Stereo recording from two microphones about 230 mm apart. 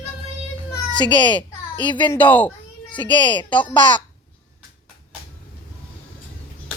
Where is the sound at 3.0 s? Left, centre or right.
Centre.